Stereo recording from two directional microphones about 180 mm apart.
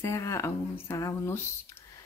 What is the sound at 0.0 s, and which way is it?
A woman's voice, 15° left (ahead or behind).